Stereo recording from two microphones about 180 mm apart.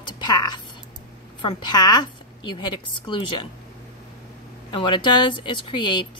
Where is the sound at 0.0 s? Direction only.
25° left (ahead or behind).